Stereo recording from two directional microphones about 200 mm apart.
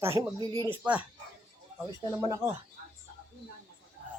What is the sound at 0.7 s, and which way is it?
Speech, 5° right (ahead or behind).